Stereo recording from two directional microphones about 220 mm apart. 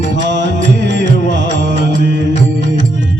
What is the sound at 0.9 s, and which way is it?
Music, 55° right (ahead or behind).